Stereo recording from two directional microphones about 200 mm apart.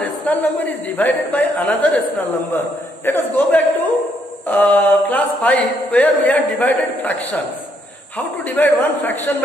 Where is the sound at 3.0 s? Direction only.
10° left (ahead or behind).